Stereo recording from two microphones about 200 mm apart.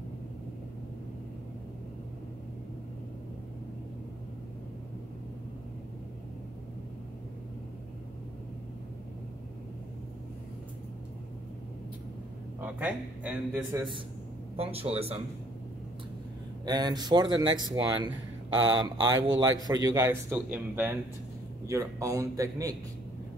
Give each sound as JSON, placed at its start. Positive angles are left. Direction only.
{"t": 12.5, "sound": "a man's voice", "side_deg": -5}
{"t": 13.7, "sound": "a man's voice", "side_deg": -25}
{"t": 16.6, "sound": "a man's voice", "side_deg": -20}